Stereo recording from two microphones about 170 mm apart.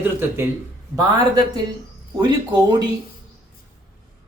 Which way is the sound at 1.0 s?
25° right (ahead or behind).